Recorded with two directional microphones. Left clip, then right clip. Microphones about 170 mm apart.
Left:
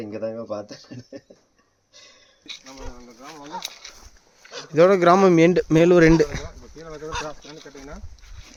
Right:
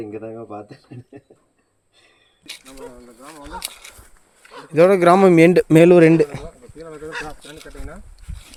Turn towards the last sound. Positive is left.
turn(degrees=-20)  # may be behind; listen again after turning